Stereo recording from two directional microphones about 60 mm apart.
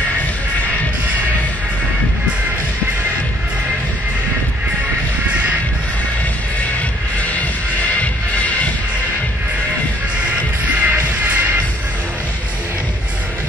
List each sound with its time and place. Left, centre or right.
8.0 s music: left
10.8 s music: right